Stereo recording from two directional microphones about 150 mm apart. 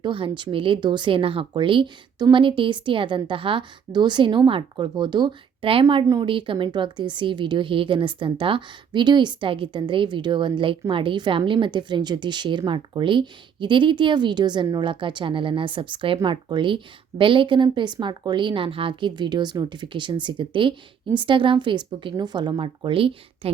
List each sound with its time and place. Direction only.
0.0 s speech: 35° right (ahead or behind)